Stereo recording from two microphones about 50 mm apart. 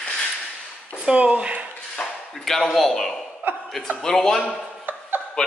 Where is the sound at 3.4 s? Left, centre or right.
Right.